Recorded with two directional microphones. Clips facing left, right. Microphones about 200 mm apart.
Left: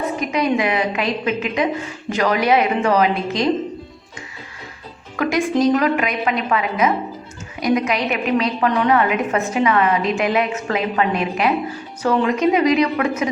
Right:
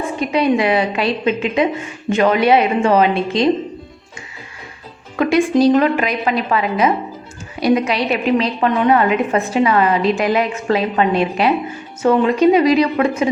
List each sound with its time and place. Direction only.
0.2 s a woman's voice: 30° right (ahead or behind)
5.1 s a woman's voice: 30° right (ahead or behind)